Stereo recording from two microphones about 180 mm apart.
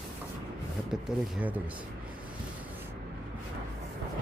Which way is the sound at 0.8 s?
5° right (ahead or behind).